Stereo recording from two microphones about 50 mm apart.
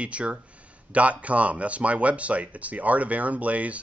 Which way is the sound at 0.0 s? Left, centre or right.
Right.